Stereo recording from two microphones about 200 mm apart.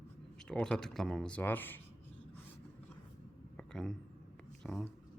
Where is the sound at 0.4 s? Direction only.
5° left (ahead or behind).